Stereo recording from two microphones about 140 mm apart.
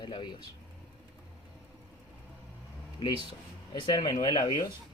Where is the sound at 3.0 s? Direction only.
35° left (ahead or behind).